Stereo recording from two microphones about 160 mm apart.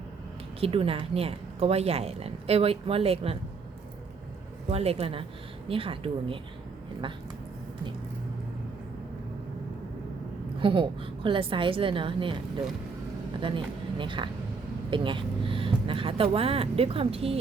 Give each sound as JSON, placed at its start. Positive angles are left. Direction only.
{"t": 0.6, "sound": "a woman's voice", "side_deg": -35}
{"t": 4.7, "sound": "a woman's voice", "side_deg": -40}
{"t": 10.6, "sound": "a woman's voice", "side_deg": -30}
{"t": 14.0, "sound": "a woman's voice", "side_deg": -30}